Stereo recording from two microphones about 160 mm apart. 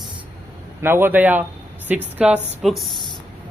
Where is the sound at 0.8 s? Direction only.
15° right (ahead or behind).